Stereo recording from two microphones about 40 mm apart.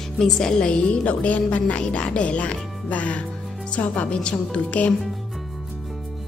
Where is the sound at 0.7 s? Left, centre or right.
Left.